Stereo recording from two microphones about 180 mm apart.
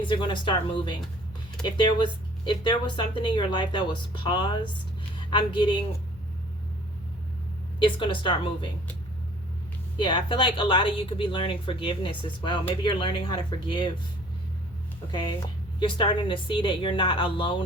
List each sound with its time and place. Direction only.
0.0 s speech: 25° left (ahead or behind)
7.8 s speech: 25° left (ahead or behind)
10.0 s speech: 25° left (ahead or behind)
15.1 s speech: 25° left (ahead or behind)